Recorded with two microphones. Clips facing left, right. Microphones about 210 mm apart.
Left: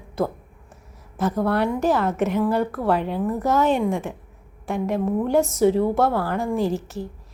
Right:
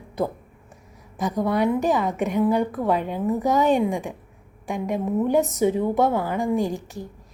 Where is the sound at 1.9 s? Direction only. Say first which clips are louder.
Left 2 dB; centre (ahead or behind).